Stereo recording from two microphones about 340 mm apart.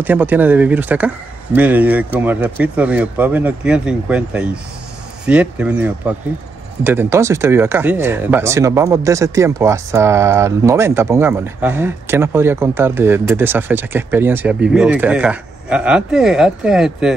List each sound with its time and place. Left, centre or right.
0.0 s speech: centre